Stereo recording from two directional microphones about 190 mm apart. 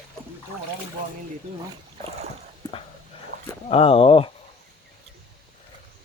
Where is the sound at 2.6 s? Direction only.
20° left (ahead or behind).